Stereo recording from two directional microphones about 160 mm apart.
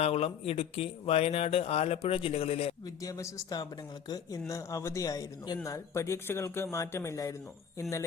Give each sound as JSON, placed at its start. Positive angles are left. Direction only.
{"t": 0.0, "sound": "speech", "side_deg": 40}
{"t": 2.8, "sound": "speech", "side_deg": 20}